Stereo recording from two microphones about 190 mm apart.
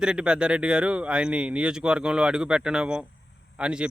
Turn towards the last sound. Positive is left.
turn(degrees=-5)  # may be behind; listen again after turning